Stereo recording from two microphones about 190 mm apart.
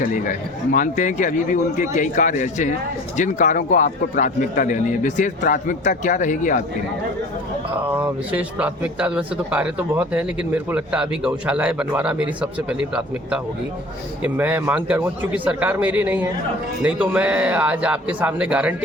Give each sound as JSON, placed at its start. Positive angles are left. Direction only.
{"t": 0.0, "sound": "a man's voice", "side_deg": 45}
{"t": 7.9, "sound": "a man's voice", "side_deg": -10}